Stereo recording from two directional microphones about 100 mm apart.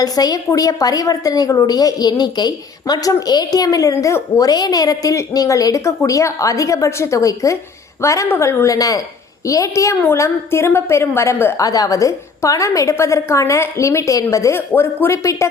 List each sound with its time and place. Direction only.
0.0 s a woman's voice: 40° left (ahead or behind)
11.6 s a woman's voice: 35° left (ahead or behind)
14.7 s a woman's voice: 20° left (ahead or behind)